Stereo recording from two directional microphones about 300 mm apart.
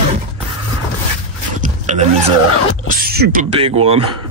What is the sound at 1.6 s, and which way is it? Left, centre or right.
Vehicle, right.